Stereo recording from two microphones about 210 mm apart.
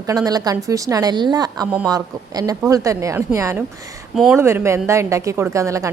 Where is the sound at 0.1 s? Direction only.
15° right (ahead or behind).